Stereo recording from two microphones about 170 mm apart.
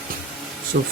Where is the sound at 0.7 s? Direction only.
70° right (ahead or behind).